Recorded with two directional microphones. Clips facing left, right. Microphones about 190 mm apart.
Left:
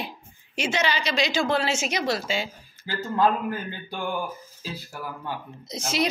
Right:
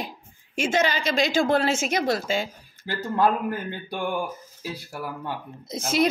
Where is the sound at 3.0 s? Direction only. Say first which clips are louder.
Even; 10° right (ahead or behind).